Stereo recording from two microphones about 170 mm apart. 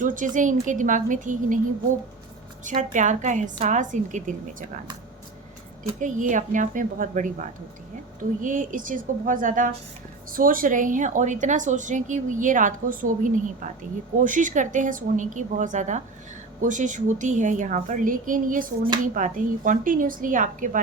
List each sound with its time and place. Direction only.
0.0 s a woman's voice: 50° right (ahead or behind)
2.6 s a woman's voice: 50° right (ahead or behind)
6.0 s a woman's voice: 50° right (ahead or behind)